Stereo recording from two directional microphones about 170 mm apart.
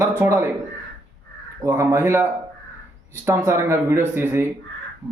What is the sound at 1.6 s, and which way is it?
Speech, 15° right (ahead or behind).